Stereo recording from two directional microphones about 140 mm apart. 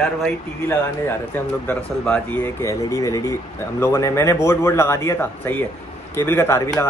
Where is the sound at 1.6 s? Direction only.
10° left (ahead or behind).